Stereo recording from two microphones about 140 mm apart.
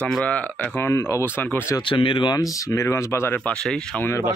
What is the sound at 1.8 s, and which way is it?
Speech, 40° left (ahead or behind).